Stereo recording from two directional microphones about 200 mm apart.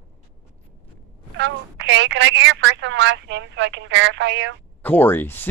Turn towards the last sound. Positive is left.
turn(degrees=10)  # may be behind; listen again after turning